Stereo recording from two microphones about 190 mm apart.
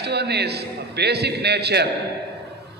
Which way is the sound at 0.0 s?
60° right (ahead or behind).